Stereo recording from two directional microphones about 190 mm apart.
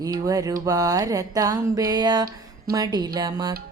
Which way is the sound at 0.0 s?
20° right (ahead or behind).